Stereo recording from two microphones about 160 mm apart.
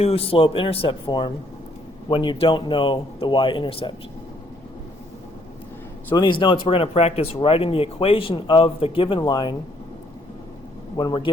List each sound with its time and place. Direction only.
0.0 s speech: 40° left (ahead or behind)
6.1 s speech: 30° left (ahead or behind)
10.9 s a man's voice: 30° left (ahead or behind)